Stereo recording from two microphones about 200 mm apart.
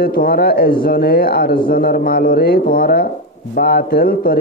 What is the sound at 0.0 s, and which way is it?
A man's voice, 50° left (ahead or behind).